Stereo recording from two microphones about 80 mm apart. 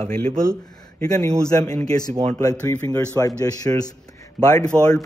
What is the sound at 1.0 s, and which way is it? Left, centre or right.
Speech, left.